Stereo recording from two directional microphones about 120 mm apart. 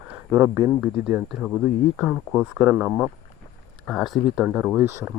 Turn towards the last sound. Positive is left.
turn(degrees=-20)  # may be behind; listen again after turning